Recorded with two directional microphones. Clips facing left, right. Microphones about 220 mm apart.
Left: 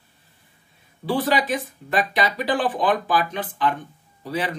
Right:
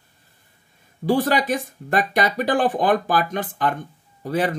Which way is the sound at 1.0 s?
45° right (ahead or behind).